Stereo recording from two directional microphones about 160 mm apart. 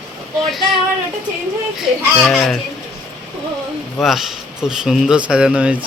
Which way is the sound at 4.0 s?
Centre (ahead or behind).